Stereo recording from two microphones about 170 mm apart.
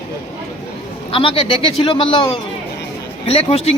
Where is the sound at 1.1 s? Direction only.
30° left (ahead or behind).